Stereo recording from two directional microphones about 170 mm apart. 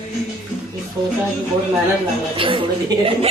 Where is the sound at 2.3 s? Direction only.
30° right (ahead or behind).